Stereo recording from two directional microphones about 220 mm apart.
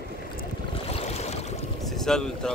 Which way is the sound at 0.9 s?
30° left (ahead or behind).